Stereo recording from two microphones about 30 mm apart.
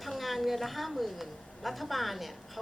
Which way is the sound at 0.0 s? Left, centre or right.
Centre.